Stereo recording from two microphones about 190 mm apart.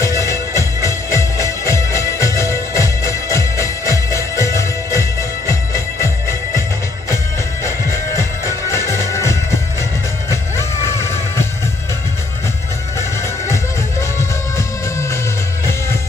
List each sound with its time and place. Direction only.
0.0 s music: 15° left (ahead or behind)
8.9 s music: 15° left (ahead or behind)